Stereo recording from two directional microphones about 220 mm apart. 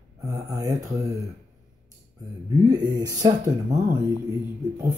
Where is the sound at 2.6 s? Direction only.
15° right (ahead or behind).